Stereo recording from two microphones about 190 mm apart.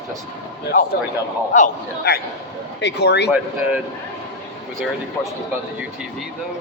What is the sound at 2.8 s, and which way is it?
Speech, 65° left (ahead or behind).